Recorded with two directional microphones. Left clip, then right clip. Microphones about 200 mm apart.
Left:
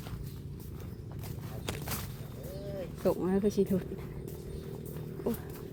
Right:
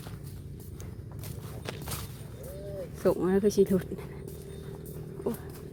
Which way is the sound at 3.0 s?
20° right (ahead or behind).